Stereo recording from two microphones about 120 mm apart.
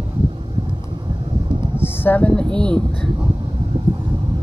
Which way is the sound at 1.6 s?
20° left (ahead or behind).